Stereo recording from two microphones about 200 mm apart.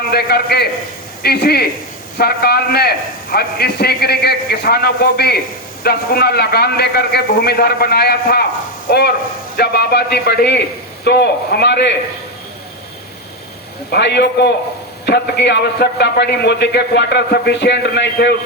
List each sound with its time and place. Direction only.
0.1 s a man's voice: 50° left (ahead or behind)
13.9 s a man's voice: 60° left (ahead or behind)